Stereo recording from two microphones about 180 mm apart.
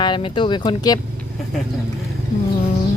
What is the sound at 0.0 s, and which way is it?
Speech, 25° left (ahead or behind).